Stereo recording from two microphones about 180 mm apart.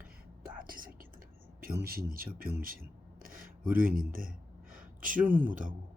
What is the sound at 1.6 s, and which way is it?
Speech, 55° right (ahead or behind).